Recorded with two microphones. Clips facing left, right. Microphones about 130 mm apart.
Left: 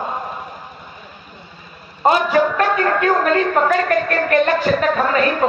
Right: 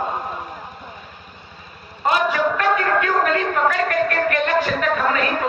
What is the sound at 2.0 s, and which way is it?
A man's voice, 35° left (ahead or behind).